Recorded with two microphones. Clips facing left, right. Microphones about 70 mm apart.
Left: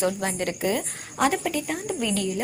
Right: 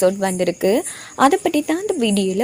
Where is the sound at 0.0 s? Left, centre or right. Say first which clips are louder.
Right 9 dB; right.